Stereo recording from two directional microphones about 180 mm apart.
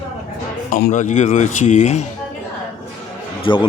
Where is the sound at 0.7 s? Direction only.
45° left (ahead or behind).